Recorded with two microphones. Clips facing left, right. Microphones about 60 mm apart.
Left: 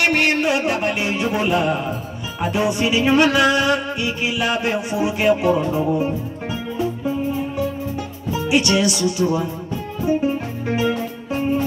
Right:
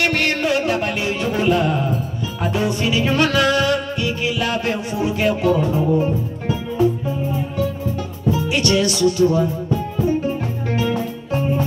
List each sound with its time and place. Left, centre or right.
0.0 s music: centre
8.5 s music: centre